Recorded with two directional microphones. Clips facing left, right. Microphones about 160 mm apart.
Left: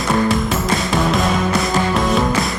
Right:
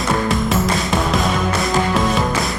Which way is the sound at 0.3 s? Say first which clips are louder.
Even; centre (ahead or behind).